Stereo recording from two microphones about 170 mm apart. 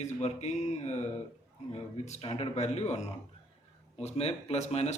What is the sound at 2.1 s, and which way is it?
Speech, 35° left (ahead or behind).